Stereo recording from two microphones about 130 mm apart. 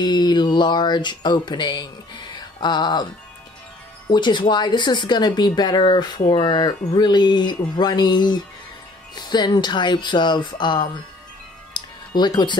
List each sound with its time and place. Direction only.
0.0 s speech: 35° left (ahead or behind)
4.1 s speech: 35° left (ahead or behind)
11.7 s music: 35° left (ahead or behind)
12.1 s speech: 35° left (ahead or behind)